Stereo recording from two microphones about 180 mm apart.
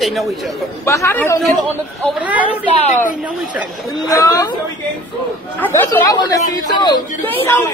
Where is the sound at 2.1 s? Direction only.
10° right (ahead or behind).